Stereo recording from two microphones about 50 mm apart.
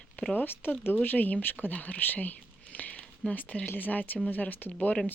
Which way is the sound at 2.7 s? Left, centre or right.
Left.